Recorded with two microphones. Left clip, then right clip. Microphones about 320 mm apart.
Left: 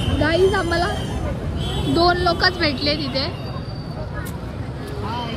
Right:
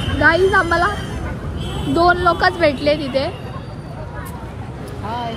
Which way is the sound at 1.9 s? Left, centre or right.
Centre.